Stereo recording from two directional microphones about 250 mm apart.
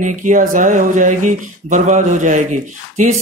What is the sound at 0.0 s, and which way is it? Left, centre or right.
A man's voice, right.